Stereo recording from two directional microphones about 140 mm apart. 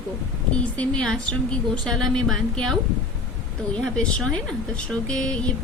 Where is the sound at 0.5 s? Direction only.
10° left (ahead or behind).